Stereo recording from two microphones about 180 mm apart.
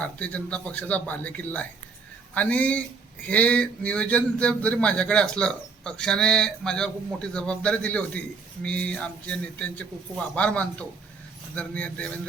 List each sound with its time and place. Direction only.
0.0 s speech: 5° left (ahead or behind)